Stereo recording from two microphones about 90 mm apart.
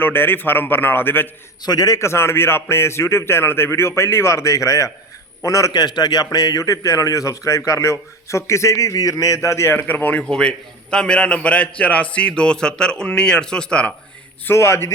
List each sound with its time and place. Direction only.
0.0 s a man's voice: 25° left (ahead or behind)
1.6 s a man's voice: 45° left (ahead or behind)
2.0 s a man's voice: 30° left (ahead or behind)
5.7 s a man's voice: 50° left (ahead or behind); by 13.9 s 10° left (ahead or behind)
14.4 s a man's voice: 30° left (ahead or behind)